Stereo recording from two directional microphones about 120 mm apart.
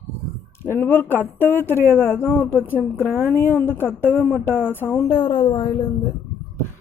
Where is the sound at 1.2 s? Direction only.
15° right (ahead or behind).